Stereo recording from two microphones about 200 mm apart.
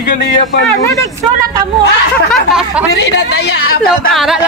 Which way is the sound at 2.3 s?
5° right (ahead or behind).